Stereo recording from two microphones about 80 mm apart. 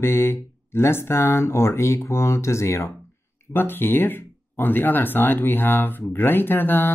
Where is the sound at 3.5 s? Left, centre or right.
Left.